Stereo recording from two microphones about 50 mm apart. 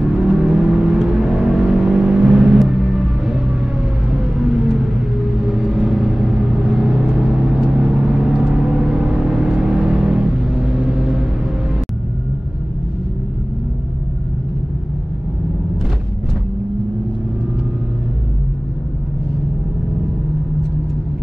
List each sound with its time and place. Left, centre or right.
0.0 s vehicle: centre
2.8 s music: centre
4.1 s vehicle: centre